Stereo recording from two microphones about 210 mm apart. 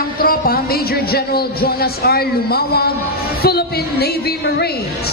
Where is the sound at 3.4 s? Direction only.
50° left (ahead or behind).